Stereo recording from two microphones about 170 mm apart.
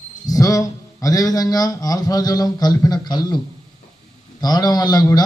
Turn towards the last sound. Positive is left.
turn(degrees=25)  # may be behind; listen again after turning